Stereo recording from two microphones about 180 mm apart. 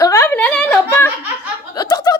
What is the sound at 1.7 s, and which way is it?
Chuckle, 20° left (ahead or behind).